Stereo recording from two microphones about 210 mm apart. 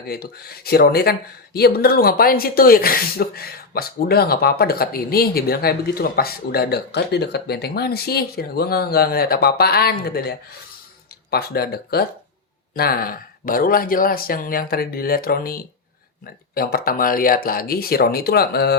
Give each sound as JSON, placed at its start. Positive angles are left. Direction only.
{"t": 0.1, "sound": "speech", "side_deg": 50}